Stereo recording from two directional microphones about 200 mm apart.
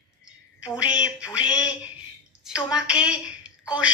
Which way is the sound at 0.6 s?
5° right (ahead or behind).